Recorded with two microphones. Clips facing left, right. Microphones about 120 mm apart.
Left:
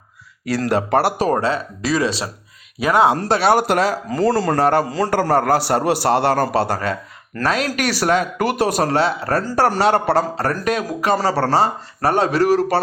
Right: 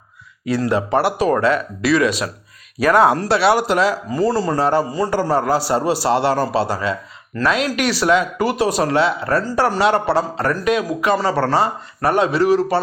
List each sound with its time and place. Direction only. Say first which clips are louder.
0.5 s speech: even; 40° left (ahead or behind); by 3.2 s 20° left (ahead or behind)
3.2 s speech: even; 45° left (ahead or behind)
4.1 s a man's voice: left 1 dB; 65° left (ahead or behind); by 12.8 s 45° left (ahead or behind)